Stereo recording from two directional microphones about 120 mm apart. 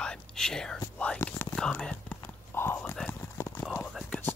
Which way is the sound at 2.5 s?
20° left (ahead or behind).